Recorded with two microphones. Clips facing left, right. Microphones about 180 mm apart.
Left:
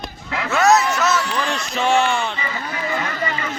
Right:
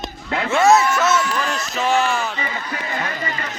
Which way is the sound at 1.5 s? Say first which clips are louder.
Left 3 dB; 5° right (ahead or behind).